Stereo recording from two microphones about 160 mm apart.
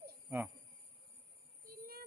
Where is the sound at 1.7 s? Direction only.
70° right (ahead or behind).